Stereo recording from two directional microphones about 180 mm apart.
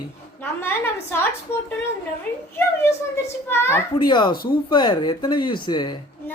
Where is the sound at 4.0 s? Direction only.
25° left (ahead or behind).